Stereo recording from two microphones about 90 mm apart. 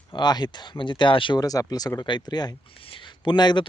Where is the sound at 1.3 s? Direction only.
40° left (ahead or behind).